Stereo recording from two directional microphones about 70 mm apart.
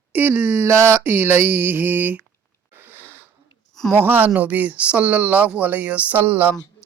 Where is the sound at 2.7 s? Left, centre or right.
Right.